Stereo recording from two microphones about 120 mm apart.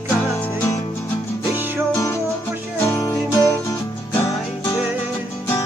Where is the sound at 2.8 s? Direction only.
25° left (ahead or behind).